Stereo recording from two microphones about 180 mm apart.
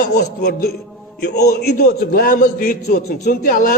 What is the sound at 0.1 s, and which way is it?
A man's voice, 65° left (ahead or behind).